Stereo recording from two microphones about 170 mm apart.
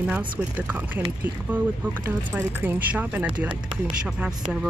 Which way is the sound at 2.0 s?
10° right (ahead or behind).